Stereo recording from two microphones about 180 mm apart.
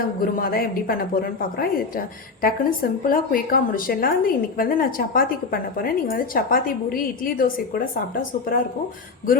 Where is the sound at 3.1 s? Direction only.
55° left (ahead or behind).